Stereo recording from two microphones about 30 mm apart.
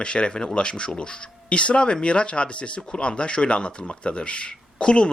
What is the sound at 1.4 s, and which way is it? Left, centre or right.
Speech, left.